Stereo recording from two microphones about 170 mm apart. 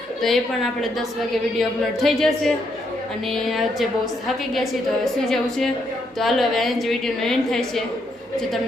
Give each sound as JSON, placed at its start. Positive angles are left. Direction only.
{"t": 0.2, "sound": "a woman's voice", "side_deg": 0}